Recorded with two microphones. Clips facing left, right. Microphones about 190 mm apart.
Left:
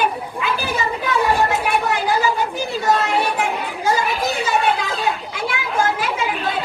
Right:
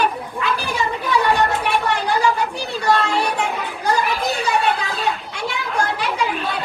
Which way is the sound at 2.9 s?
5° left (ahead or behind).